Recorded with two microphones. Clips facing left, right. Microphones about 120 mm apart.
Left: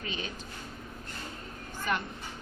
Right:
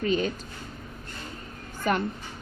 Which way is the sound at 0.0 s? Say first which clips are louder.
Right 13 dB; 45° right (ahead or behind).